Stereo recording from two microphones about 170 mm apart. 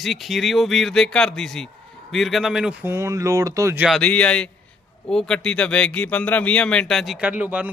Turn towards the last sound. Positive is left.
turn(degrees=-10)  # may be behind; listen again after turning